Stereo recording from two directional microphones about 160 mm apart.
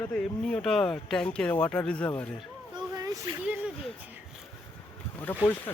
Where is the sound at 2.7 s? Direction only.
25° right (ahead or behind).